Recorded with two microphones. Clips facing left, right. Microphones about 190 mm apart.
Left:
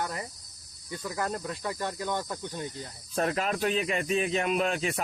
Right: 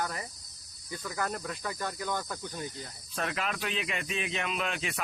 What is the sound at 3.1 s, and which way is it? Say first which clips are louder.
Speech: left 6 dB; 40° left (ahead or behind).